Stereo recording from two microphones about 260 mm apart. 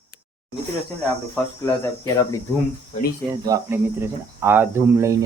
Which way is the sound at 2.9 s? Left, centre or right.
Left.